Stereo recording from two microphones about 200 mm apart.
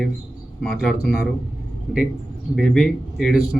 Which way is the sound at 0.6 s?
Centre (ahead or behind).